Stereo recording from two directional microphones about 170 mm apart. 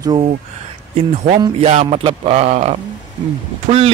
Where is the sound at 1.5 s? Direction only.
40° right (ahead or behind).